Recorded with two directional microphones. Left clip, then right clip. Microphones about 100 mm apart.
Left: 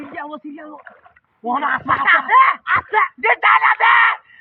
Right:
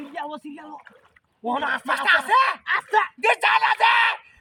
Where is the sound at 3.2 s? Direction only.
65° right (ahead or behind).